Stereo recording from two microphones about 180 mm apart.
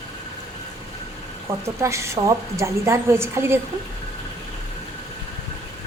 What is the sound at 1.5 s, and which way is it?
A woman's voice, 15° right (ahead or behind).